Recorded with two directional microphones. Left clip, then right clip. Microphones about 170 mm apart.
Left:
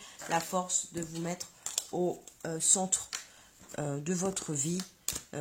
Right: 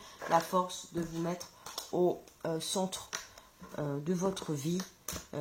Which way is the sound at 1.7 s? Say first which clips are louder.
Right 2 dB; 35° left (ahead or behind).